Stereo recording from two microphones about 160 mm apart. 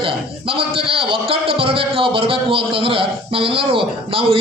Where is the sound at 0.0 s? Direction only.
35° right (ahead or behind).